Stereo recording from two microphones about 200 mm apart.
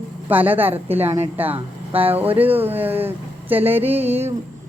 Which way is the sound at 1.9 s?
30° right (ahead or behind).